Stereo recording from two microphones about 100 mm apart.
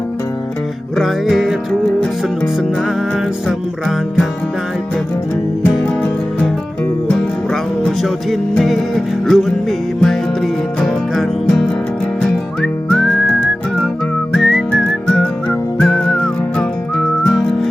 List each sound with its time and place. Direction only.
0.9 s music: centre (ahead or behind)
5.6 s music: 15° left (ahead or behind)
7.2 s music: centre (ahead or behind)
12.2 s whistling: 10° left (ahead or behind)
14.3 s whistling: centre (ahead or behind)